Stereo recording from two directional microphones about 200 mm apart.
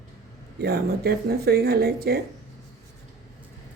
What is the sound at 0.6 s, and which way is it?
Speech, 55° right (ahead or behind).